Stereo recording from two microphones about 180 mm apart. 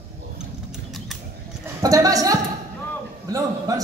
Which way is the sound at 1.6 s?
20° right (ahead or behind).